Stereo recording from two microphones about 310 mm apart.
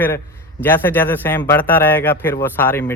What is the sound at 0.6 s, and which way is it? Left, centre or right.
Speech, centre.